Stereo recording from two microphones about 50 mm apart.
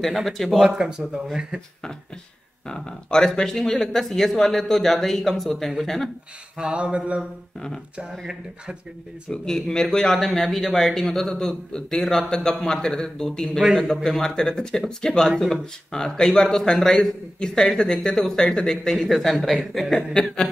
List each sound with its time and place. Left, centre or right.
0.0 s speech: centre
0.7 s speech: centre
2.6 s speech: centre
6.5 s a sound: centre
9.3 s speech: centre
13.6 s speech: centre
14.0 s speech: centre